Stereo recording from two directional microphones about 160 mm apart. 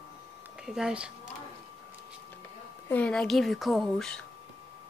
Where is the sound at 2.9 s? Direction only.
5° left (ahead or behind).